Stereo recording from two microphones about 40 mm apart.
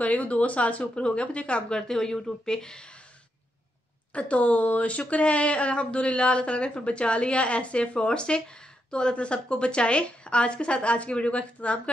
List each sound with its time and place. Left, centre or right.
0.0 s a woman's voice: left
1.8 s speech: centre
4.1 s a woman's voice: left